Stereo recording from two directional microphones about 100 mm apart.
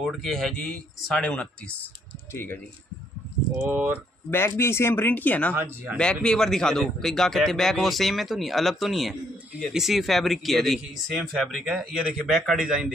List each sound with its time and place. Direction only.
0.0 s speech: 5° left (ahead or behind); by 2.6 s 20° left (ahead or behind)
3.6 s speech: 20° right (ahead or behind)
4.3 s speech: 25° left (ahead or behind)
5.5 s speech: 20° right (ahead or behind)
5.9 s a man's voice: 10° left (ahead or behind)